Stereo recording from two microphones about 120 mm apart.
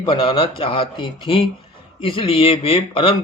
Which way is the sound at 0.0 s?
45° left (ahead or behind).